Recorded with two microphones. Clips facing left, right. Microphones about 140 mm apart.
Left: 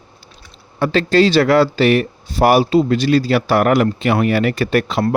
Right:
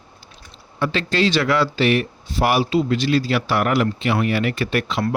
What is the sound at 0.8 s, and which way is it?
Speech, 40° left (ahead or behind).